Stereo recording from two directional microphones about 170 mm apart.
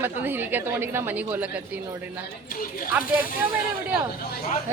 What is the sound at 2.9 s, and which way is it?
Speech, 10° right (ahead or behind).